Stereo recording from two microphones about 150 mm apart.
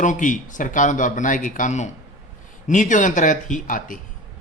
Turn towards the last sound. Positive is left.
turn(degrees=60)  # may be behind; listen again after turning